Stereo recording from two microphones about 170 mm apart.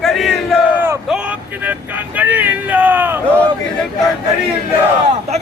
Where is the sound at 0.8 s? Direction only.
10° right (ahead or behind).